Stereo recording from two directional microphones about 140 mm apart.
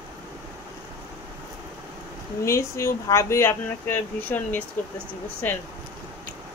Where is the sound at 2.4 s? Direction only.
20° left (ahead or behind).